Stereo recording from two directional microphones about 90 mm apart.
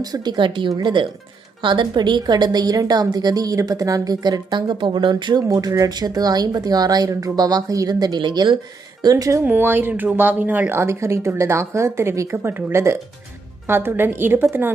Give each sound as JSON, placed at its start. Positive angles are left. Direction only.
{"t": 0.0, "sound": "a woman's voice", "side_deg": -50}
{"t": 5.5, "sound": "a woman's voice", "side_deg": -40}
{"t": 9.0, "sound": "speech", "side_deg": -45}
{"t": 9.4, "sound": "speech", "side_deg": -20}